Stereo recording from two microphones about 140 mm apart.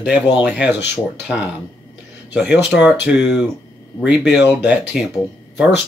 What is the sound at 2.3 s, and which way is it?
Speech, 5° right (ahead or behind).